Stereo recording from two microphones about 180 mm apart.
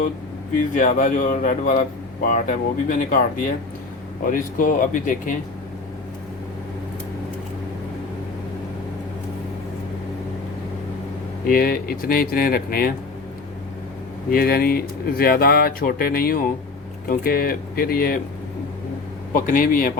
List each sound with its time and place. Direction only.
0.7 s speech: 45° left (ahead or behind)
4.3 s speech: 50° left (ahead or behind)
11.4 s speech: 55° left (ahead or behind)
14.3 s speech: 55° left (ahead or behind)
19.3 s speech: 50° left (ahead or behind)